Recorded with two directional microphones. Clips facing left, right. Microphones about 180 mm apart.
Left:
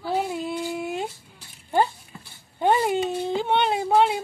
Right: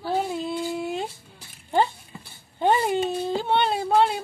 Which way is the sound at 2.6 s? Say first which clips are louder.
Even; 10° left (ahead or behind).